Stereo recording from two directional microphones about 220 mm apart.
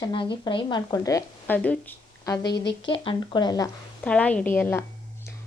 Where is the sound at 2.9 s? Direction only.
20° left (ahead or behind).